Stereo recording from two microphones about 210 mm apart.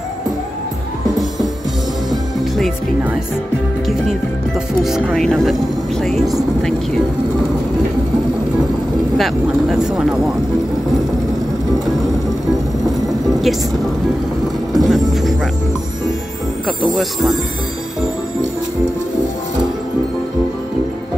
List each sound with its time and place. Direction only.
2.0 s music: centre (ahead or behind)
4.8 s speech: centre (ahead or behind)
9.2 s speech: centre (ahead or behind)
14.8 s speech: centre (ahead or behind)
16.6 s speech: centre (ahead or behind)